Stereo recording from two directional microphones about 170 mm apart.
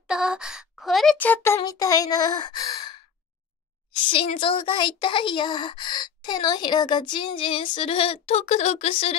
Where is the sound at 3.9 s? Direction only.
30° left (ahead or behind).